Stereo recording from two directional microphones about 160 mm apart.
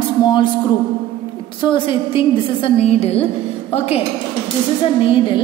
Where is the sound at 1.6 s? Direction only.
30° left (ahead or behind).